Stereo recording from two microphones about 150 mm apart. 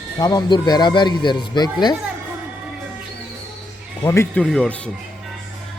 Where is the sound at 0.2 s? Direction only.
25° left (ahead or behind).